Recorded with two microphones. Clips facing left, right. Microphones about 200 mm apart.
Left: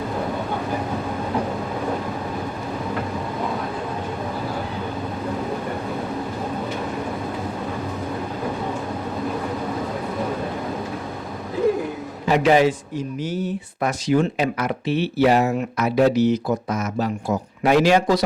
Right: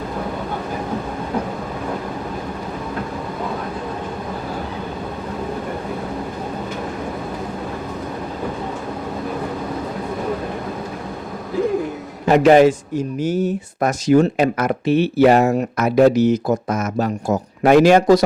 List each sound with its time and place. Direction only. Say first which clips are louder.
12.3 s speech: right 5 dB; 50° right (ahead or behind)